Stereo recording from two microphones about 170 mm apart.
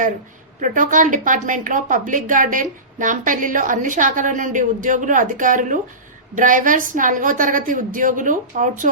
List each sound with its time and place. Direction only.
0.6 s a woman's voice: 50° right (ahead or behind)